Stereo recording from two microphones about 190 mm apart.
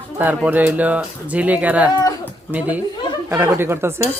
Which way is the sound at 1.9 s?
20° left (ahead or behind).